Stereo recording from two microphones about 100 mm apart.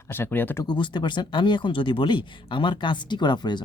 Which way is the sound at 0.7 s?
50° left (ahead or behind).